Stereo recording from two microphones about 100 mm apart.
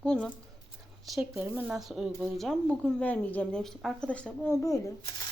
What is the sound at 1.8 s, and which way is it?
Speech, 5° right (ahead or behind).